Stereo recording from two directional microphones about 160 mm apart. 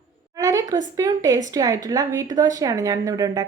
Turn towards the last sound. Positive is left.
turn(degrees=-25)  # may be behind; listen again after turning